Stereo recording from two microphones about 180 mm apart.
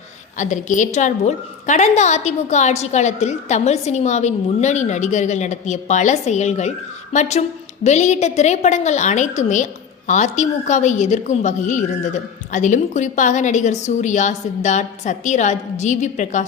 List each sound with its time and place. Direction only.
0.3 s a woman's voice: 45° left (ahead or behind)